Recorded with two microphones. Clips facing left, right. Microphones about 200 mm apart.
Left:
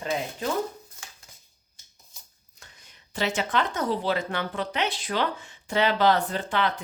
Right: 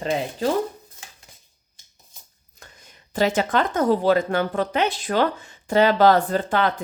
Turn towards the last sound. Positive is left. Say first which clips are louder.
# right 5 dB
turn(degrees=-40)  # may be behind; listen again after turning